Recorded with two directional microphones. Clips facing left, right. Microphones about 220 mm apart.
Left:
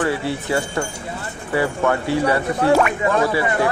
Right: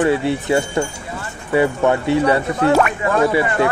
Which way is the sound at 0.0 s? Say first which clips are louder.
Right 5 dB; 20° right (ahead or behind).